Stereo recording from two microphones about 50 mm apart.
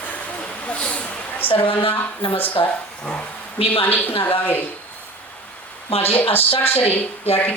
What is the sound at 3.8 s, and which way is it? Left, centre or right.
Speech, left.